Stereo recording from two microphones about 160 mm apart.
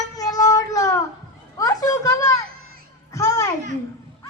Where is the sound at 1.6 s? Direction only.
20° left (ahead or behind).